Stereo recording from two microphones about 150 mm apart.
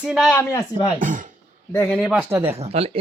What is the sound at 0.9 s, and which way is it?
Speech, 60° right (ahead or behind).